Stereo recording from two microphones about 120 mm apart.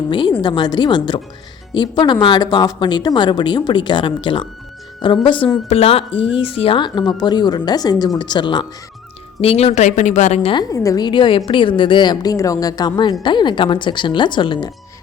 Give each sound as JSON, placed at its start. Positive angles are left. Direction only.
{"t": 0.1, "sound": "speech", "side_deg": 40}
{"t": 5.6, "sound": "speech", "side_deg": 55}
{"t": 9.4, "sound": "speech", "side_deg": 55}
{"t": 10.5, "sound": "speech", "side_deg": 35}